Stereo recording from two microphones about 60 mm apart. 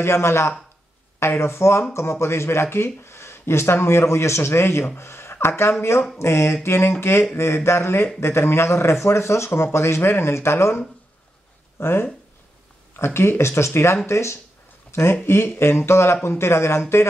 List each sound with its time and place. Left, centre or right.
0.0 s speech: left
11.8 s speech: left